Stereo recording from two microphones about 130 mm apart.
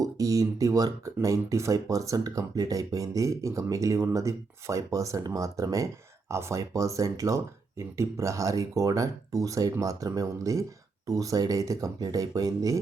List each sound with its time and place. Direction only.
0.0 s speech: 25° right (ahead or behind)